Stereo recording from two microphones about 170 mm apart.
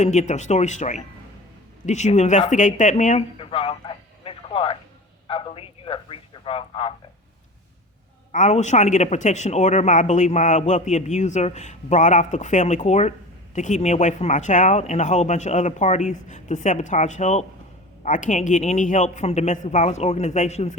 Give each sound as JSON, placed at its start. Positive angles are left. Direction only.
{"t": 0.0, "sound": "a man's voice", "side_deg": 45}
{"t": 3.2, "sound": "radio", "side_deg": 30}
{"t": 5.3, "sound": "a man's voice", "side_deg": 35}
{"t": 8.3, "sound": "a man's voice", "side_deg": 45}